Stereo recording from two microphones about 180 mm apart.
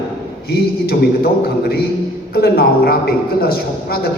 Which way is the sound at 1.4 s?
60° left (ahead or behind).